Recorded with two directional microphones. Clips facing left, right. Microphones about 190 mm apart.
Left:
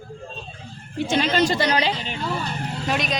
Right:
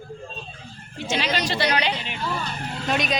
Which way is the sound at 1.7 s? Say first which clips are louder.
Left 2 dB; 35° left (ahead or behind).